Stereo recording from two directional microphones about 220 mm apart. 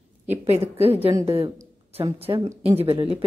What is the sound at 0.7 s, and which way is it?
Speech, 25° right (ahead or behind).